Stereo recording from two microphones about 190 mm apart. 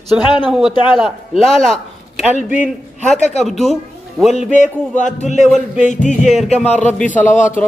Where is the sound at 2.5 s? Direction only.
10° right (ahead or behind).